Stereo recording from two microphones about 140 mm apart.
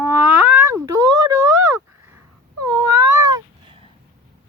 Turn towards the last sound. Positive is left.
turn(degrees=-20)  # may be behind; listen again after turning